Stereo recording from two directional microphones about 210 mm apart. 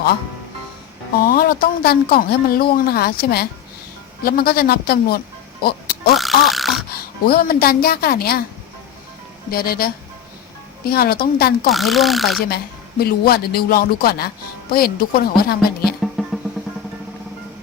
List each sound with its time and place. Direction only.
1.2 s speech: 45° left (ahead or behind)
5.6 s music: 45° left (ahead or behind)
6.4 s dog: centre (ahead or behind)
6.9 s speech: 45° left (ahead or behind)
9.5 s speech: 45° left (ahead or behind)
11.7 s speech: centre (ahead or behind)
13.0 s speech: 50° left (ahead or behind)
16.0 s music: centre (ahead or behind)